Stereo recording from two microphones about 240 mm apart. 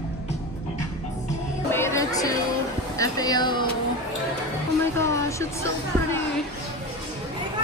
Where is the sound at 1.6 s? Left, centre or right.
Centre.